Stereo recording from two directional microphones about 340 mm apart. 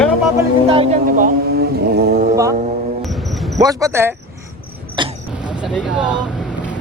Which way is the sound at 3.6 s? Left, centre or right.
Centre.